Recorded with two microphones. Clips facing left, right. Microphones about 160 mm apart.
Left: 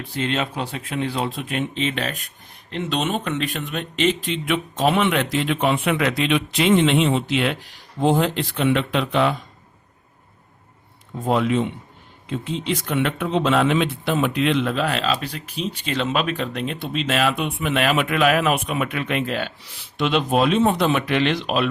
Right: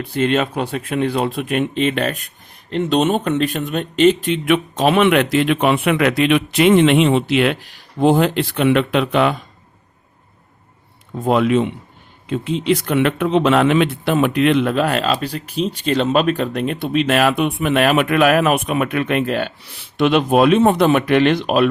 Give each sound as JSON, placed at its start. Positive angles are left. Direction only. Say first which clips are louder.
{"t": 0.1, "sound": "speech", "louder": "right 7 dB", "side_deg": -55}
{"t": 2.6, "sound": "speech", "louder": "right 8 dB", "side_deg": -40}
{"t": 4.4, "sound": "a man's voice", "louder": "right 4 dB", "side_deg": -70}
{"t": 11.3, "sound": "a man's voice", "louder": "right 5 dB", "side_deg": -70}